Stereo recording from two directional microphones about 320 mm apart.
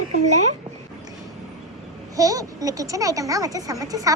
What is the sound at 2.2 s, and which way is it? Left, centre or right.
Speech, centre.